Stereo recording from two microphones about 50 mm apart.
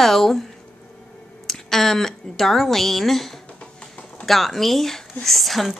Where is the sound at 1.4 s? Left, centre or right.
Centre.